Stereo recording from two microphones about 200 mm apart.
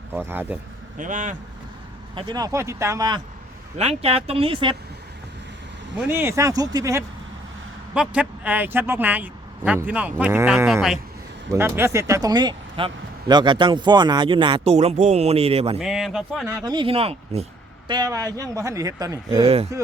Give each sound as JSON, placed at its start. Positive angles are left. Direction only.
{"t": 0.1, "sound": "a man's voice", "side_deg": -10}
{"t": 0.9, "sound": "speech", "side_deg": -40}
{"t": 2.1, "sound": "a man's voice", "side_deg": -20}
{"t": 3.8, "sound": "speech", "side_deg": -30}
{"t": 6.1, "sound": "a man's voice", "side_deg": -15}
{"t": 7.9, "sound": "a man's voice", "side_deg": -5}
{"t": 15.8, "sound": "speech", "side_deg": 0}
{"t": 16.5, "sound": "speech", "side_deg": -20}
{"t": 17.8, "sound": "a man's voice", "side_deg": -20}